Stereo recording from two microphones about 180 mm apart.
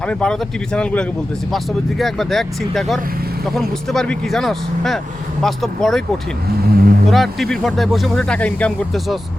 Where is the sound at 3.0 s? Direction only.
55° right (ahead or behind).